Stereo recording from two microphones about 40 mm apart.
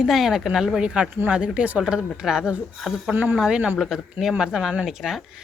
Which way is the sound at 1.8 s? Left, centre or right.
Centre.